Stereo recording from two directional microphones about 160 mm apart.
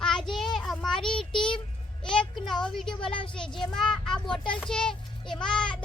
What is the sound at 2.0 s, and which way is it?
A child's voice, 5° left (ahead or behind).